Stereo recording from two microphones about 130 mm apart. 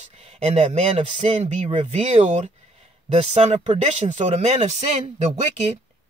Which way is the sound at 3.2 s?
50° right (ahead or behind).